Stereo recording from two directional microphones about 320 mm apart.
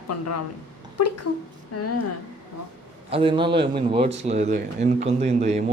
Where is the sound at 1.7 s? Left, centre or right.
Left.